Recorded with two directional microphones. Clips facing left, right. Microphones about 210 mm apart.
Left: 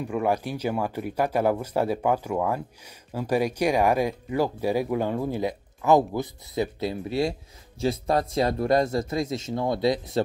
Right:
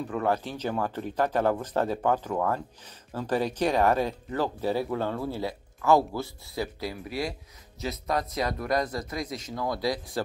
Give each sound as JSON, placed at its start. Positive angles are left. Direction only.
{"t": 0.0, "sound": "speech", "side_deg": 10}